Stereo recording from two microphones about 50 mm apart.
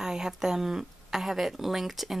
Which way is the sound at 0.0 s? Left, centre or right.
Centre.